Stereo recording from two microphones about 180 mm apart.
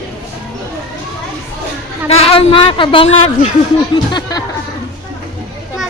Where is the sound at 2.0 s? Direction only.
35° left (ahead or behind).